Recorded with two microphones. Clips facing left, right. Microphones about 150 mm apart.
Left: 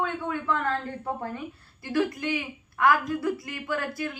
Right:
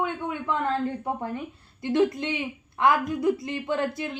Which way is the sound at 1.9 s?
20° right (ahead or behind).